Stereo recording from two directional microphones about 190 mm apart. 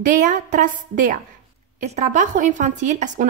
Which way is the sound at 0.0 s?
40° right (ahead or behind).